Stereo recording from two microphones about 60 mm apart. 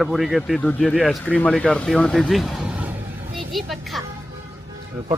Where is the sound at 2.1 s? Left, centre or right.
Centre.